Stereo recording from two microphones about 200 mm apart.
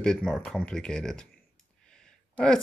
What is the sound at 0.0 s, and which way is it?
Speech, centre (ahead or behind).